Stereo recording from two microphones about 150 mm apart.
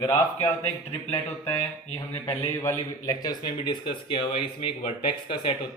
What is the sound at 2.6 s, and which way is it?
A man's voice, 25° left (ahead or behind).